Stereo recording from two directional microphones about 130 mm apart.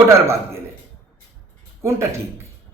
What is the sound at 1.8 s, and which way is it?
Speech, 20° right (ahead or behind).